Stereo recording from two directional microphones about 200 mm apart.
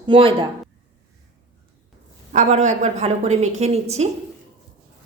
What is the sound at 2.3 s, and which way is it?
A woman's voice, 35° right (ahead or behind).